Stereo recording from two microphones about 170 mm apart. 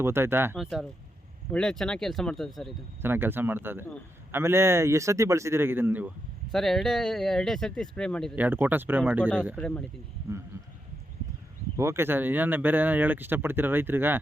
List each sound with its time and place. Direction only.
0.0 s speech: 15° right (ahead or behind)
0.5 s speech: centre (ahead or behind)
3.0 s speech: 10° right (ahead or behind)
6.5 s speech: centre (ahead or behind)
8.4 s speech: 10° right (ahead or behind)
9.6 s speech: 5° left (ahead or behind)
10.5 s sheep: 15° right (ahead or behind)
11.8 s speech: 15° right (ahead or behind)